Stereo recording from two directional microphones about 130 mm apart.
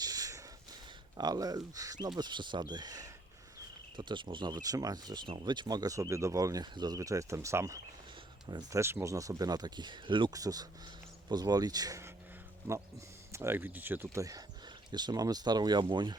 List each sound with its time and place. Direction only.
0.0 s a sound: 30° right (ahead or behind)
1.1 s speech: 30° right (ahead or behind)
8.4 s speech: 35° right (ahead or behind)
8.8 s speech: 20° right (ahead or behind)
13.3 s speech: 20° right (ahead or behind); by 16.1 s 35° right (ahead or behind)